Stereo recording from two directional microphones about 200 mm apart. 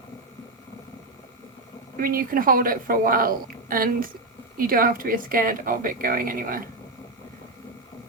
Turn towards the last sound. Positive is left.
turn(degrees=-45)  # may be behind; listen again after turning